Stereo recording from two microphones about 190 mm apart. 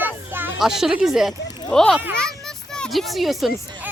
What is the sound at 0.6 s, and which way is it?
Speech, centre (ahead or behind).